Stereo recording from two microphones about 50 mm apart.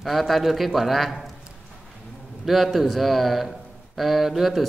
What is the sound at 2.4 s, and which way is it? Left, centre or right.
A man's voice, centre.